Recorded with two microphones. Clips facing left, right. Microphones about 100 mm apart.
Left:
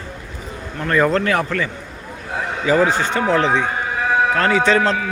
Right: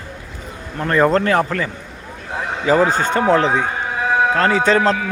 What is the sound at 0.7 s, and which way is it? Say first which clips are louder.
A man's voice: right 2 dB; 30° right (ahead or behind).